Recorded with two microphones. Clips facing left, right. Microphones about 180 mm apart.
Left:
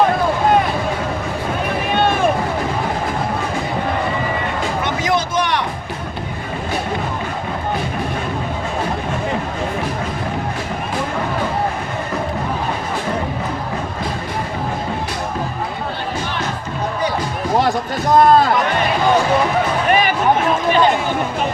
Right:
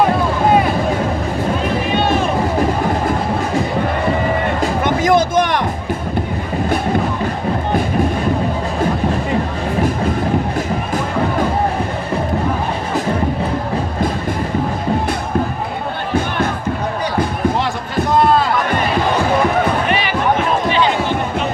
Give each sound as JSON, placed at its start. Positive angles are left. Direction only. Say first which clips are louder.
{"t": 4.6, "sound": "music", "louder": "right 5 dB", "side_deg": -50}
{"t": 18.1, "sound": "a sound", "louder": "left 3 dB", "side_deg": 45}
{"t": 19.9, "sound": "music", "louder": "left 3 dB", "side_deg": 45}